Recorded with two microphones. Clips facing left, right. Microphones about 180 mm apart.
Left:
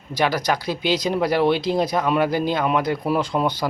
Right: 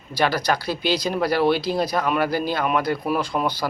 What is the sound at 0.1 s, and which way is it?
Speech, 15° left (ahead or behind).